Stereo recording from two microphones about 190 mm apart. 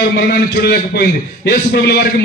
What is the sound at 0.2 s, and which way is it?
A man's voice, 55° left (ahead or behind).